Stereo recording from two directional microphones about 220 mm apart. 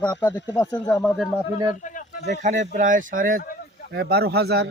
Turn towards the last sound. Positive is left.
turn(degrees=-45)  # may be behind; listen again after turning